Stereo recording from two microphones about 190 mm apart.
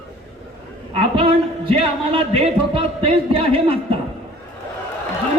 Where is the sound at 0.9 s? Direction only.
30° right (ahead or behind).